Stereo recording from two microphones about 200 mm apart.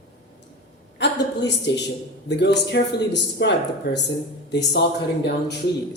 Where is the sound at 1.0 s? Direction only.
60° left (ahead or behind).